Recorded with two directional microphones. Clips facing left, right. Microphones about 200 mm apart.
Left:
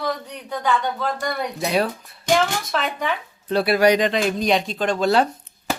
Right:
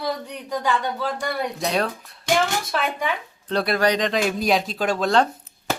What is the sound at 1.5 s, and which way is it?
Speech, 5° left (ahead or behind).